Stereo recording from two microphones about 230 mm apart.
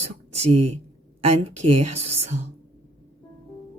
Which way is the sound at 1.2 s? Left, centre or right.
Right.